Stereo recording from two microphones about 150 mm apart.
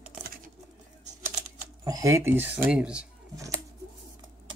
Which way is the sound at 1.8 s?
20° right (ahead or behind).